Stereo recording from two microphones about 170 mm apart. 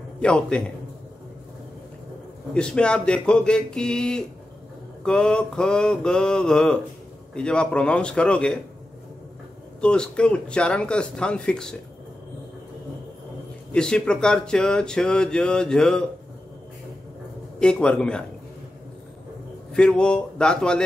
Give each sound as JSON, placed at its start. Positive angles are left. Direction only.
{"t": 0.2, "sound": "speech", "side_deg": 5}
{"t": 2.5, "sound": "speech", "side_deg": 5}
{"t": 9.8, "sound": "speech", "side_deg": 5}
{"t": 13.7, "sound": "speech", "side_deg": 5}
{"t": 17.6, "sound": "speech", "side_deg": 5}
{"t": 19.7, "sound": "speech", "side_deg": 5}